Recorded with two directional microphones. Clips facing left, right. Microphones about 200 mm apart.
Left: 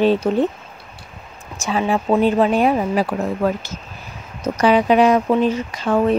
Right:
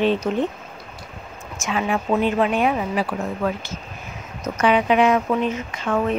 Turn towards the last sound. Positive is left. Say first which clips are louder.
# left 5 dB
turn(degrees=35)  # may be behind; listen again after turning